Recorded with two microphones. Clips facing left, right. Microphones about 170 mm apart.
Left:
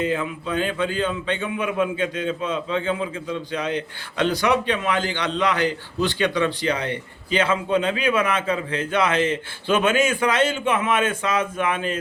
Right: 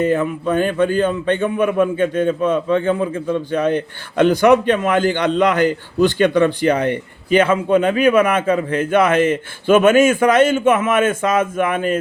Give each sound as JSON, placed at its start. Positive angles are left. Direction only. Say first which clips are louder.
{"t": 0.0, "sound": "a man's voice", "louder": "right 7 dB", "side_deg": -55}